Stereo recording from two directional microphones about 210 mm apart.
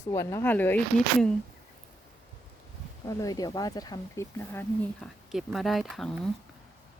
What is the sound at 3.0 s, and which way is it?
Speech, 15° left (ahead or behind).